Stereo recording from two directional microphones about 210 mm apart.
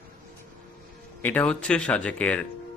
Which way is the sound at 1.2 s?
5° left (ahead or behind).